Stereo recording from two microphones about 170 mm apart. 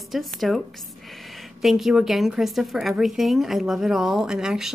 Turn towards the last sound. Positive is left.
turn(degrees=-5)  # may be behind; listen again after turning